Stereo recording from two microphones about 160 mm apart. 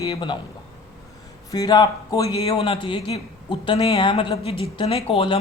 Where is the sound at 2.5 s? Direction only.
35° left (ahead or behind).